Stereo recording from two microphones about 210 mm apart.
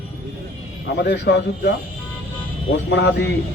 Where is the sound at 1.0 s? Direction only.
55° left (ahead or behind).